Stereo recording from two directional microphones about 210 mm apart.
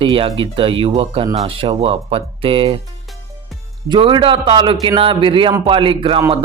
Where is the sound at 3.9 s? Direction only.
20° right (ahead or behind).